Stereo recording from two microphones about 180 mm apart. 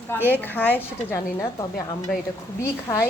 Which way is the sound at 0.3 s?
10° left (ahead or behind).